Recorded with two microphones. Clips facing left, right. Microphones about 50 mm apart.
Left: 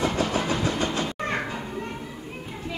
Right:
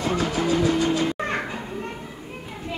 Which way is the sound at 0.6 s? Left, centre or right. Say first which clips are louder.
Right 5 dB; left.